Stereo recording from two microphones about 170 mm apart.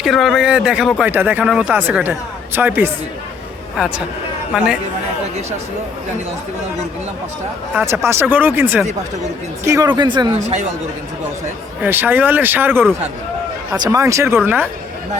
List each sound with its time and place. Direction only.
0.0 s speech: centre (ahead or behind)
7.7 s speech: 15° right (ahead or behind)
11.8 s speech: 10° right (ahead or behind)